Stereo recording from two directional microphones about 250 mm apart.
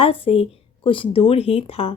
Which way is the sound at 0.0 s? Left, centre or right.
Left.